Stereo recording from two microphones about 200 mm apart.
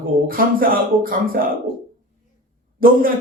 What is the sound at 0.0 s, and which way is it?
A man's voice, 45° right (ahead or behind).